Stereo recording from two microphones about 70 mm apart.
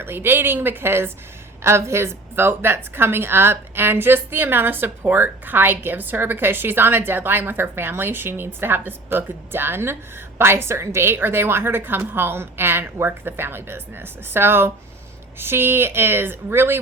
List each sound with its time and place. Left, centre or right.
0.0 s a woman's voice: right